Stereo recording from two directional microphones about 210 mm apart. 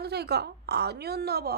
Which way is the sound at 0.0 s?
50° right (ahead or behind).